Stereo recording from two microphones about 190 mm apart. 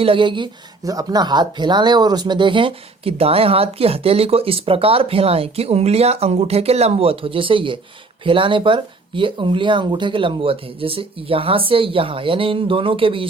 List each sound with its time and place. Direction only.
0.0 s speech: 25° right (ahead or behind)